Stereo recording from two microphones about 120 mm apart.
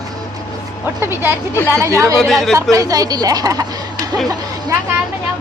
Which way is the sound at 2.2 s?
Centre (ahead or behind).